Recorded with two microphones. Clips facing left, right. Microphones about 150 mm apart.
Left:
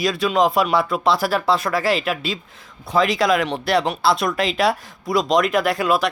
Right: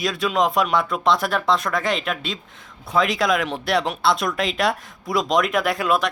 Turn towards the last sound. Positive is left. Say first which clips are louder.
# left 2 dB
turn(degrees=0)  # may be behind; listen again after turning